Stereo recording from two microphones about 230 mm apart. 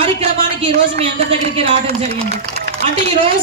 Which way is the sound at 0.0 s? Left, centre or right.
Right.